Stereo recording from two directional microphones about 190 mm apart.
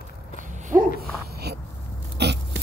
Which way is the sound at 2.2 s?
60° right (ahead or behind).